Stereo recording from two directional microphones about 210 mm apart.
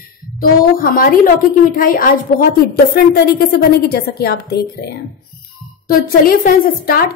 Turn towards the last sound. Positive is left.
turn(degrees=45)  # may be behind; listen again after turning